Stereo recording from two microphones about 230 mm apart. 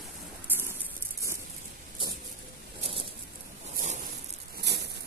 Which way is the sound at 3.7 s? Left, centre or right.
Right.